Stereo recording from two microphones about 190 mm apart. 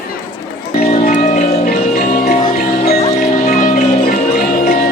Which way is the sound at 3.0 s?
40° left (ahead or behind).